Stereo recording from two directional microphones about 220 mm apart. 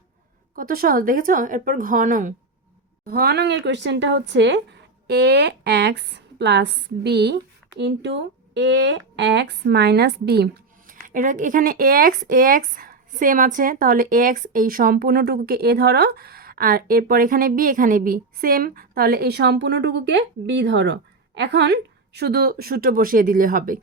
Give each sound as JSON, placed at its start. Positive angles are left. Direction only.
{"t": 0.5, "sound": "speech", "side_deg": -40}